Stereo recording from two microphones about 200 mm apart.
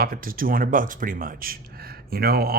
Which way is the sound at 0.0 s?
45° right (ahead or behind).